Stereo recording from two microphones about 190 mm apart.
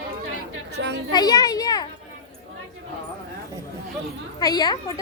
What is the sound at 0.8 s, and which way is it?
Speech, 65° right (ahead or behind).